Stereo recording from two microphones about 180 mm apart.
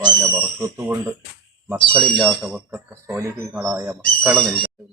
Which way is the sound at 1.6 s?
10° right (ahead or behind).